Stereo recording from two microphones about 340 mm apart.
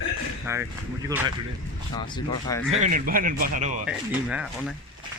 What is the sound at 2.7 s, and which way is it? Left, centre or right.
Speech, right.